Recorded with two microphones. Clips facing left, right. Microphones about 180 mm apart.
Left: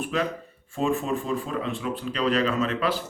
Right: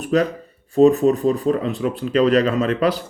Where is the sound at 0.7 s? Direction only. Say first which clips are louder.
Right 12 dB; 40° right (ahead or behind).